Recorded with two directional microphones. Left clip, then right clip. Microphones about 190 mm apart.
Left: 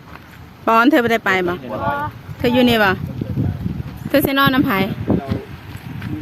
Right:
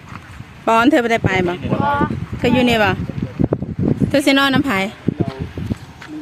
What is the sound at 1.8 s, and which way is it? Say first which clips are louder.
Speech: right 4 dB; 30° right (ahead or behind).